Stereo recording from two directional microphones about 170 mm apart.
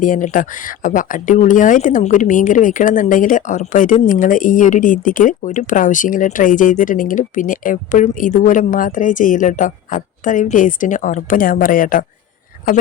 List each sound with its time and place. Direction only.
0.0 s speech: 50° left (ahead or behind)